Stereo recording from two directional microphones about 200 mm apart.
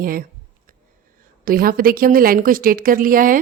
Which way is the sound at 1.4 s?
45° right (ahead or behind).